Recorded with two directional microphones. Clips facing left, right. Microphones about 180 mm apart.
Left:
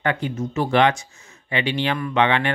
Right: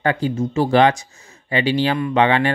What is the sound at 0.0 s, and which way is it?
Speech, 35° right (ahead or behind).